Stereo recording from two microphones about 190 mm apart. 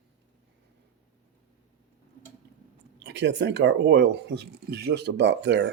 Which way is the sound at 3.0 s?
65° right (ahead or behind).